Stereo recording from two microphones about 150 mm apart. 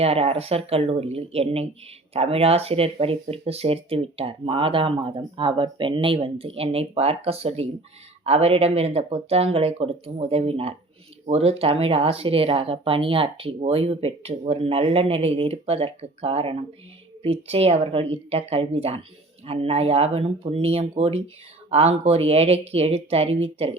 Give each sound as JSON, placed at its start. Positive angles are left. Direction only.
{"t": 0.0, "sound": "speech", "side_deg": -40}